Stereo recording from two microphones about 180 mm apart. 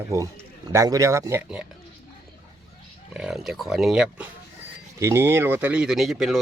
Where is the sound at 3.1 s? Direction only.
5° right (ahead or behind).